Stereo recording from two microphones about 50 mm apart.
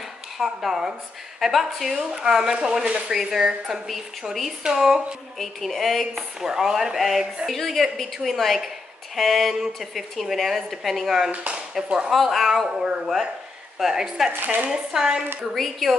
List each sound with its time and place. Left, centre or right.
0.4 s a woman's voice: centre
2.0 s a woman's voice: centre
5.4 s a woman's voice: centre
6.4 s a woman's voice: centre
12.6 s speech: centre
14.3 s speech: right
14.7 s speech: centre
15.5 s a woman's voice: centre